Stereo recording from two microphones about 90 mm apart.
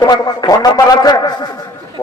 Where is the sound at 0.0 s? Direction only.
50° left (ahead or behind).